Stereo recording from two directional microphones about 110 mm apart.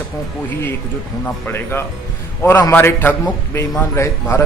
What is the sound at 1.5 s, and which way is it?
A man's voice, 20° left (ahead or behind).